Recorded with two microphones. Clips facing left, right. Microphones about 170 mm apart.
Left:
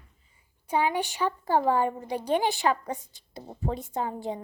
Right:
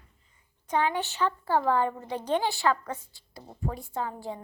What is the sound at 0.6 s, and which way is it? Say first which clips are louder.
A woman's voice: left 1 dB; 10° left (ahead or behind).